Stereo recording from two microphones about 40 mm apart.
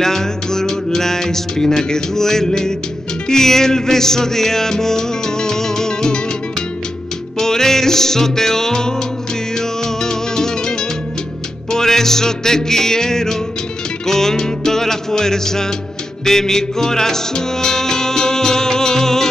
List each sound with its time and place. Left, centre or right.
0.0 s music: centre
7.3 s music: centre